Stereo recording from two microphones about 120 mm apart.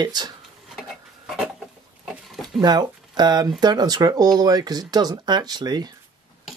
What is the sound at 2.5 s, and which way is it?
Speech, 35° right (ahead or behind).